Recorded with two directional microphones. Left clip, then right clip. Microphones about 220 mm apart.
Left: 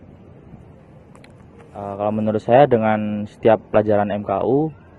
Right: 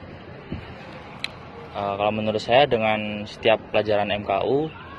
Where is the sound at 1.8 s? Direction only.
35° left (ahead or behind).